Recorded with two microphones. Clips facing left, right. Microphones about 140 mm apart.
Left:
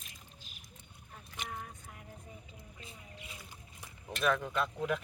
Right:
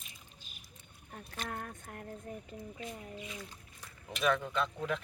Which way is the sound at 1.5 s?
60° right (ahead or behind).